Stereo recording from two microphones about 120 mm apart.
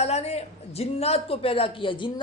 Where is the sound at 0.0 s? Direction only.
65° left (ahead or behind).